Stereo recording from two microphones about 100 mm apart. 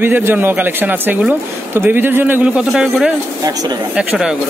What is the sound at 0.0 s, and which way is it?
Speech, 20° right (ahead or behind).